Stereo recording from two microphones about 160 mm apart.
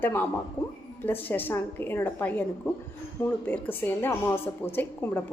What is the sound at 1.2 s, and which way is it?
A woman's voice, 10° left (ahead or behind).